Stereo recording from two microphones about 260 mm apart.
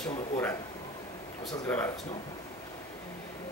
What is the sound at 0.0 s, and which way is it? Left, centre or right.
Speech, centre.